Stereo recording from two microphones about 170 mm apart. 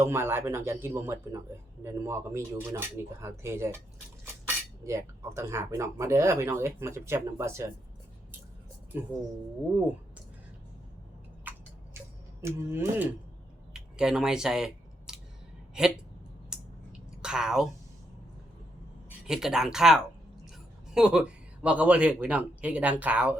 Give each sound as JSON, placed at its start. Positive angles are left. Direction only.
{"t": 0.0, "sound": "speech", "side_deg": -15}
{"t": 8.9, "sound": "speech", "side_deg": -10}
{"t": 11.5, "sound": "tick-tock", "side_deg": -10}
{"t": 12.4, "sound": "speech", "side_deg": -15}
{"t": 13.7, "sound": "scissors", "side_deg": -5}
{"t": 16.5, "sound": "a sound", "side_deg": -5}
{"t": 17.2, "sound": "a woman's voice", "side_deg": -5}
{"t": 19.3, "sound": "speech", "side_deg": -5}